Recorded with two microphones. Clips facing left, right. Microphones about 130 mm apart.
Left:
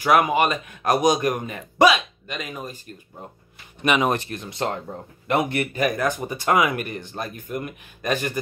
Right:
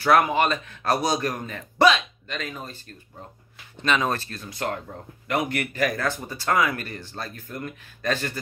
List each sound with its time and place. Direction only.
0.0 s speech: 15° left (ahead or behind)